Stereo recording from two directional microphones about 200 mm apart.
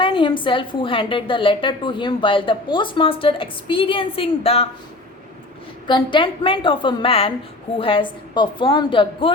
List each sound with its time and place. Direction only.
0.0 s a woman's voice: 25° left (ahead or behind)
5.9 s a woman's voice: 25° left (ahead or behind)